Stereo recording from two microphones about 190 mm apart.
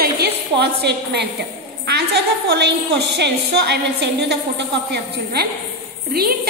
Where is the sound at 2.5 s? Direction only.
60° right (ahead or behind).